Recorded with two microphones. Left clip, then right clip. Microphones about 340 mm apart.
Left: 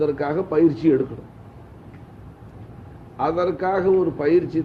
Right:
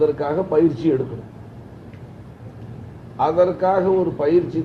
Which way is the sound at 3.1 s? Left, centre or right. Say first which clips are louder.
Right 5 dB; left.